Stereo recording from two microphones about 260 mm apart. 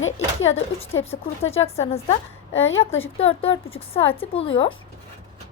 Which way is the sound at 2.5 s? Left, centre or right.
Left.